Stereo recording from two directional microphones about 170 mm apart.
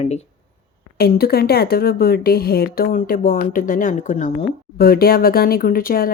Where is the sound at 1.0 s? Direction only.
65° left (ahead or behind); by 4.3 s 45° left (ahead or behind).